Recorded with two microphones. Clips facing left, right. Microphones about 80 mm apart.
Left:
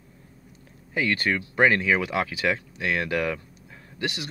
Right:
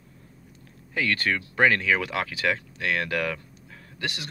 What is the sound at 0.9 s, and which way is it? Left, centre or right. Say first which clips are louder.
Speech: left 1 dB; centre.